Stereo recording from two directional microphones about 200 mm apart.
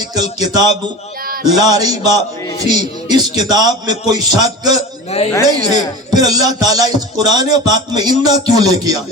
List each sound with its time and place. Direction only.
0.1 s speech: 20° right (ahead or behind)
5.1 s a woman's voice: 30° left (ahead or behind)
5.5 s speech: 20° right (ahead or behind)